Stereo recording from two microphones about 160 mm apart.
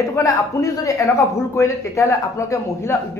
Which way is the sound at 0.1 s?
20° left (ahead or behind).